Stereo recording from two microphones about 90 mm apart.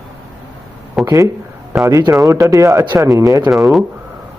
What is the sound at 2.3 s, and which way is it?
Speech, 35° right (ahead or behind).